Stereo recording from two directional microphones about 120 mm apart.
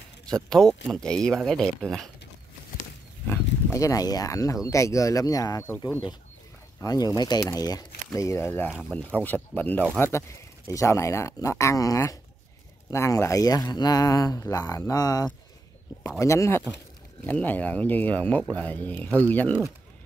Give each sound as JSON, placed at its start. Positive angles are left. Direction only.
{"t": 0.5, "sound": "speech", "side_deg": 5}
{"t": 3.3, "sound": "speech", "side_deg": 25}
{"t": 6.8, "sound": "speech", "side_deg": 30}